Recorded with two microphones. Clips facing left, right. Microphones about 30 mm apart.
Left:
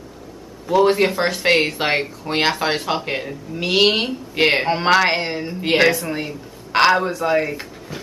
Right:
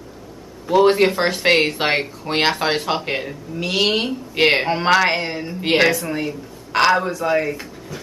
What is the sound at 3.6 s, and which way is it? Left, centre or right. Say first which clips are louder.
Speech: left 2 dB; centre.